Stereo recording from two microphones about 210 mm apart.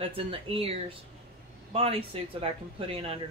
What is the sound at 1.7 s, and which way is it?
Speech, 25° right (ahead or behind).